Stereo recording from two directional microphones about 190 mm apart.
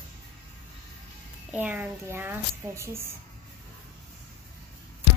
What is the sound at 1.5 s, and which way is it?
Speech, 10° right (ahead or behind).